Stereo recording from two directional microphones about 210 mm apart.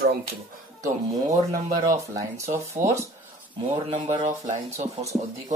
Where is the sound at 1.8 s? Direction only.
15° right (ahead or behind).